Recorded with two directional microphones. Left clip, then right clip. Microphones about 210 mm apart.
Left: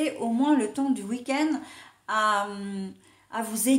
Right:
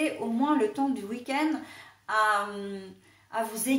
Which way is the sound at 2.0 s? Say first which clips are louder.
Left 1 dB; 45° left (ahead or behind).